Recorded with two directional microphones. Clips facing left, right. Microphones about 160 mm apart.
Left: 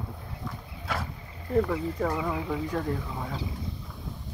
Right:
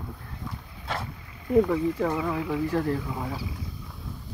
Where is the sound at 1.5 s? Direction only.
10° right (ahead or behind).